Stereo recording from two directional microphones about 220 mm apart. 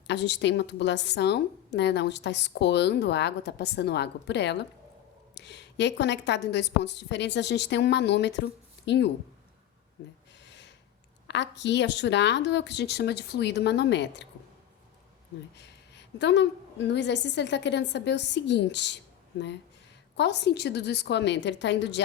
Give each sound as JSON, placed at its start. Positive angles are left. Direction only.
{"t": 0.1, "sound": "a woman's voice", "side_deg": 55}
{"t": 10.4, "sound": "a sound", "side_deg": 55}
{"t": 11.3, "sound": "a woman's voice", "side_deg": 55}
{"t": 15.5, "sound": "a woman's voice", "side_deg": 50}
{"t": 20.1, "sound": "a woman's voice", "side_deg": 50}